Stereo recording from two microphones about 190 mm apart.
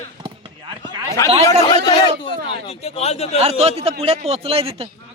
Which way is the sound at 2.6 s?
35° left (ahead or behind).